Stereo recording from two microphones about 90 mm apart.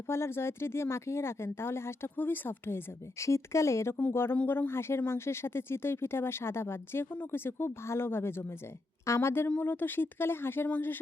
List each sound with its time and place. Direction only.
0.1 s speech: 30° left (ahead or behind)